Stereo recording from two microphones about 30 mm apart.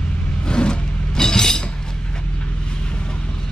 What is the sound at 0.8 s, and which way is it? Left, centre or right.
Wood, left.